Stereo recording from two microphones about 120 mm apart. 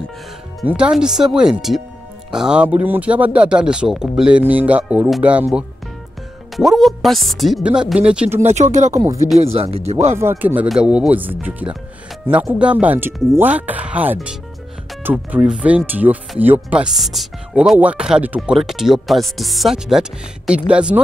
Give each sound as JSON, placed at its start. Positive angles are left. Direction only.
{"t": 0.7, "sound": "speech", "side_deg": -10}
{"t": 8.4, "sound": "speech", "side_deg": -75}
{"t": 9.4, "sound": "speech", "side_deg": -55}
{"t": 10.1, "sound": "speech", "side_deg": -20}